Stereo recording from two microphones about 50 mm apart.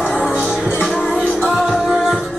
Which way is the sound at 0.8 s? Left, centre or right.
Centre.